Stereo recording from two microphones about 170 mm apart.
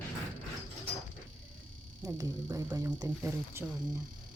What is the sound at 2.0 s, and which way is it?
Speech, 20° right (ahead or behind).